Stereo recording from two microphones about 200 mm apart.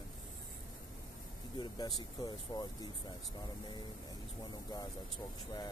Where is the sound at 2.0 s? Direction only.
20° left (ahead or behind).